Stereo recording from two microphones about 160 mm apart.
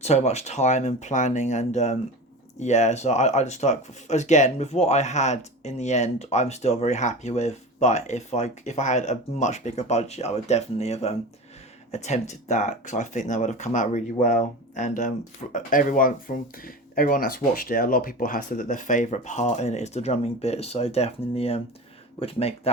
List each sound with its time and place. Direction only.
0.0 s speech: 45° left (ahead or behind)